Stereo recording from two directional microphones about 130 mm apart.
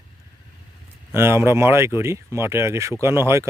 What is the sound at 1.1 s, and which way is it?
Speech, 20° right (ahead or behind).